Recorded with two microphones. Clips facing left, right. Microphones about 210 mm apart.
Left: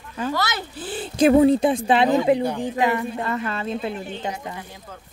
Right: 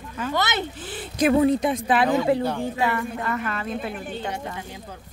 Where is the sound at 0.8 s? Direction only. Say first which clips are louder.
Left 6 dB; 30° left (ahead or behind).